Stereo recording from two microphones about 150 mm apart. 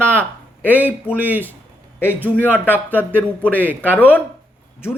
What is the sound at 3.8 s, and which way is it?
Speech, 10° left (ahead or behind).